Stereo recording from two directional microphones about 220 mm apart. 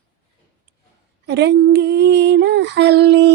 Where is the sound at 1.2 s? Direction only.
50° right (ahead or behind).